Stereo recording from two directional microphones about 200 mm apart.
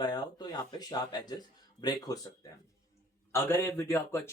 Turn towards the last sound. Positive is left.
turn(degrees=10)  # may be behind; listen again after turning